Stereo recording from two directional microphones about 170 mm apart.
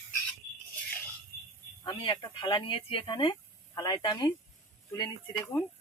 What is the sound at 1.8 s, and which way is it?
Speech, 30° left (ahead or behind).